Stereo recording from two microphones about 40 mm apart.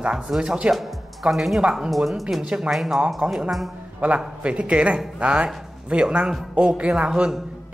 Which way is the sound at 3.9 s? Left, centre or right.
Right.